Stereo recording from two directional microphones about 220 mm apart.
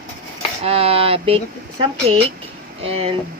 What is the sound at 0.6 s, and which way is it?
Speech, 25° right (ahead or behind).